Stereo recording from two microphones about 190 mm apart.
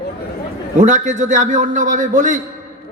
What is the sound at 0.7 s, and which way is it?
A man's voice, 40° right (ahead or behind).